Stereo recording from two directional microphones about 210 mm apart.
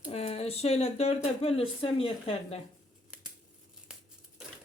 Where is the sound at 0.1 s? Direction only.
30° left (ahead or behind).